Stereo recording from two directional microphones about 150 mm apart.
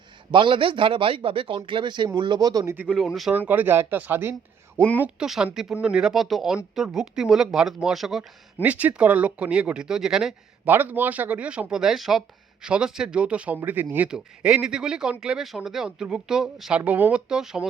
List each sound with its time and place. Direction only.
0.3 s speech: 35° right (ahead or behind)
2.7 s speech: 5° right (ahead or behind)